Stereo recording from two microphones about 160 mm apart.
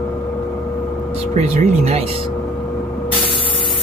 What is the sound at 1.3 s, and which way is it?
Speech, 45° right (ahead or behind).